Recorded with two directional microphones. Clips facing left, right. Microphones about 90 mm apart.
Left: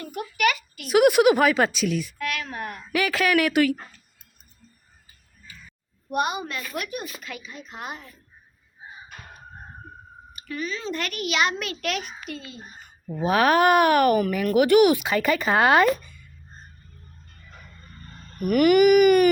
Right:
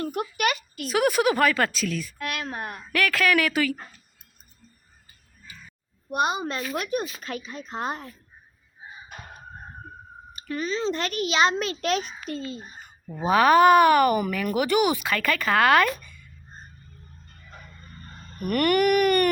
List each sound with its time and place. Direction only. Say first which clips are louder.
0.8 s a woman's voice: left 6 dB; 15° left (ahead or behind)
2.1 s a child's voice: left 1 dB; 25° right (ahead or behind)
2.9 s a woman's voice: left 1 dB; 15° left (ahead or behind)
6.1 s a woman's voice: right 1 dB; 25° right (ahead or behind)
10.3 s a child's voice: right 3 dB; 30° right (ahead or behind)
13.2 s a woman's voice: right 2 dB; 10° left (ahead or behind)
14.6 s speech: left 6 dB; 20° left (ahead or behind)
18.3 s speech: left 5 dB; 5° left (ahead or behind)